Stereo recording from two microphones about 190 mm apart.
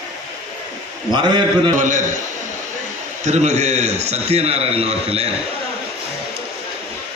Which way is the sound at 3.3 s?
35° right (ahead or behind).